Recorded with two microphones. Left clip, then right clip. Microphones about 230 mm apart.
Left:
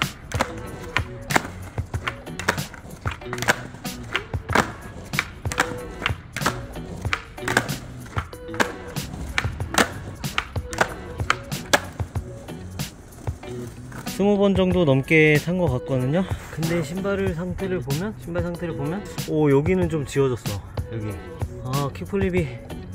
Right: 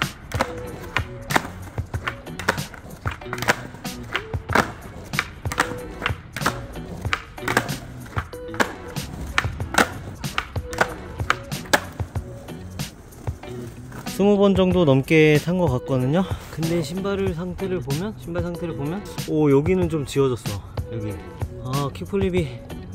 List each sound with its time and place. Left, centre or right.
0.0 s music: centre
14.3 s speech: centre
16.3 s speech: centre